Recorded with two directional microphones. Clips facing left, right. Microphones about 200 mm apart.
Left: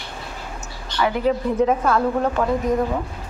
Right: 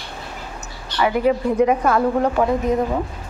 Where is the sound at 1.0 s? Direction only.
10° right (ahead or behind).